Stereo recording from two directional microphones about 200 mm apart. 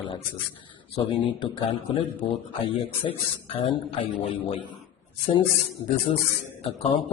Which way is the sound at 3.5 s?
25° left (ahead or behind).